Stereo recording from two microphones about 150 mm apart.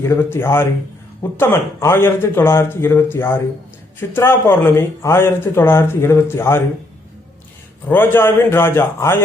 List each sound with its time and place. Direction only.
0.0 s speech: 15° left (ahead or behind)
7.9 s speech: 15° left (ahead or behind)